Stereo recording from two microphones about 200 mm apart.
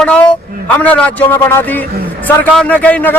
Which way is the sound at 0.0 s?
5° left (ahead or behind).